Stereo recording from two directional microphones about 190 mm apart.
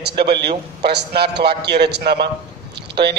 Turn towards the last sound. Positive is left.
turn(degrees=-60)  # may be behind; listen again after turning